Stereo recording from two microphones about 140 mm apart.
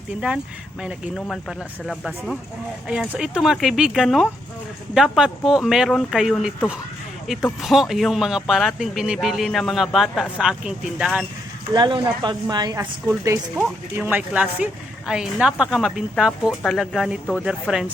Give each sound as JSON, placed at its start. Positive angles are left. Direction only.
{"t": 0.8, "sound": "speech", "side_deg": -5}
{"t": 1.1, "sound": "speech", "side_deg": 5}
{"t": 11.7, "sound": "speech", "side_deg": -35}